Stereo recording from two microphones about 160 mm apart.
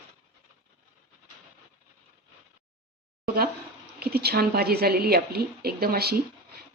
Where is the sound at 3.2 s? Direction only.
75° right (ahead or behind).